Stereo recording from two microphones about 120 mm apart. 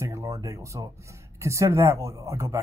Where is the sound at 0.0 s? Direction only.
25° right (ahead or behind).